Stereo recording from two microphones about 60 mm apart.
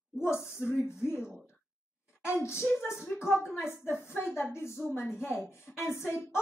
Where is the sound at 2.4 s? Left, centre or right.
Left.